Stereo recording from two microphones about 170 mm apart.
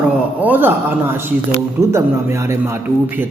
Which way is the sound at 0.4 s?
10° right (ahead or behind).